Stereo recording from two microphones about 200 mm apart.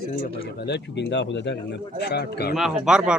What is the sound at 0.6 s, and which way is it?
A man's voice, 60° left (ahead or behind).